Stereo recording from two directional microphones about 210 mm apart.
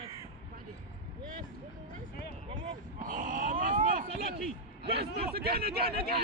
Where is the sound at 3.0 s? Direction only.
40° right (ahead or behind).